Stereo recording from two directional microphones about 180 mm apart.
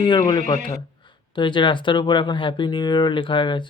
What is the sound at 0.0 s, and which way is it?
Speech, 25° left (ahead or behind).